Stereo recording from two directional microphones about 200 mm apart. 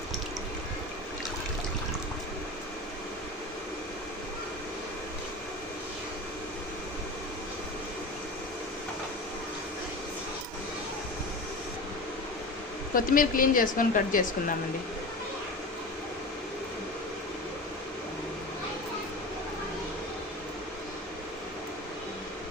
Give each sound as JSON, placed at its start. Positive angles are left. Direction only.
{"t": 12.9, "sound": "speech", "side_deg": 45}